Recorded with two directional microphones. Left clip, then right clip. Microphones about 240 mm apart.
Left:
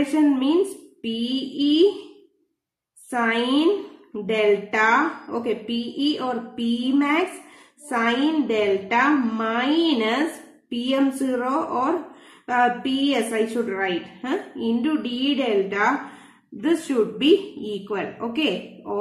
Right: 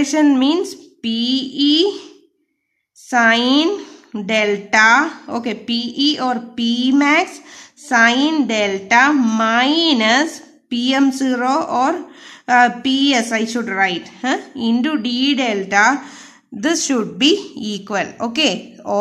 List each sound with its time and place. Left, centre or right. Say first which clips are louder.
0.1 s a woman's voice: right 5 dB; right
3.1 s a woman's voice: right 9 dB; right